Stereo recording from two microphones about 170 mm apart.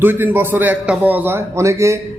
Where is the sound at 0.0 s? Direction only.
10° right (ahead or behind).